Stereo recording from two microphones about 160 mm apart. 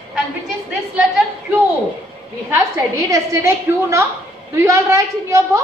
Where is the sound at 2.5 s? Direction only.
20° right (ahead or behind).